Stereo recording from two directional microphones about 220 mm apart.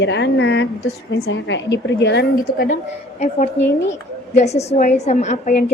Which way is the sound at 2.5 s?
40° left (ahead or behind).